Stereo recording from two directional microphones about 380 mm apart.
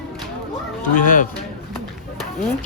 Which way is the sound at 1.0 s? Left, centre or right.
Left.